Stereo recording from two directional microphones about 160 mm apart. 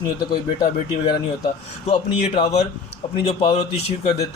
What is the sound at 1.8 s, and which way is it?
Speech, 35° left (ahead or behind).